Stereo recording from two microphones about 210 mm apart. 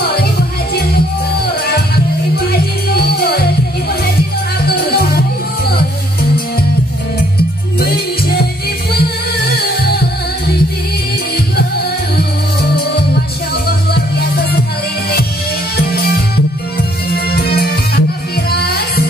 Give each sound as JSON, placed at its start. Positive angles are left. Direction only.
{"t": 3.2, "sound": "music", "side_deg": 50}
{"t": 4.6, "sound": "music", "side_deg": 50}
{"t": 9.6, "sound": "music", "side_deg": 50}
{"t": 13.7, "sound": "music", "side_deg": 45}
{"t": 15.9, "sound": "music", "side_deg": 45}